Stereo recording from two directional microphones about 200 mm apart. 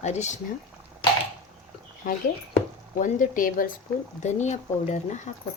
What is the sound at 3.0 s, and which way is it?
Speech, 40° left (ahead or behind).